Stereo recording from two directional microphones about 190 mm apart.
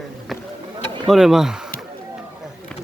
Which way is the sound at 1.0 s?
Centre (ahead or behind).